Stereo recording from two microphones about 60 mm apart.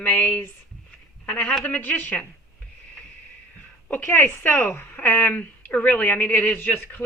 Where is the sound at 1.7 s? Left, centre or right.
Left.